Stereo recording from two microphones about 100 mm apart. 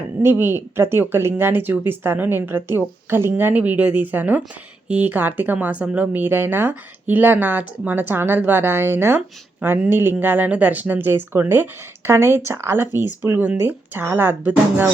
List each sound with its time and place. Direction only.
0.2 s speech: 20° right (ahead or behind)